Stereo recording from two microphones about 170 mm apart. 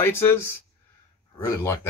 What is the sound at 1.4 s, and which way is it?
Speech, 20° left (ahead or behind).